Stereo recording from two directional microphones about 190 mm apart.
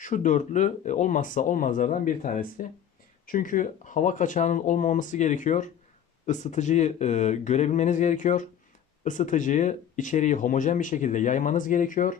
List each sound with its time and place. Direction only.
0.0 s speech: 40° left (ahead or behind)